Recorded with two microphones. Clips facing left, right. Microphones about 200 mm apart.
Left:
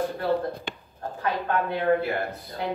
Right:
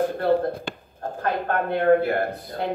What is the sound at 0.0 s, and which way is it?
Speech, 50° right (ahead or behind).